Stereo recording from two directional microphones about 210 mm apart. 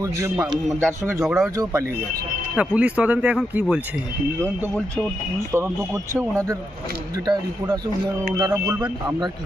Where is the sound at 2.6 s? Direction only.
5° right (ahead or behind).